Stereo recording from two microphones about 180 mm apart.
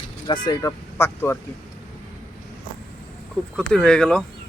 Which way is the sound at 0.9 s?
15° left (ahead or behind).